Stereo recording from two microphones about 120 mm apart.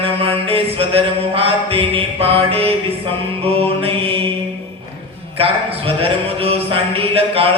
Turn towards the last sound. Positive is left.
turn(degrees=-50)  # may be behind; listen again after turning